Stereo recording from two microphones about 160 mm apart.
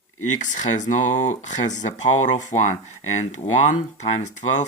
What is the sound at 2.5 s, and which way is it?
Speech, 50° left (ahead or behind).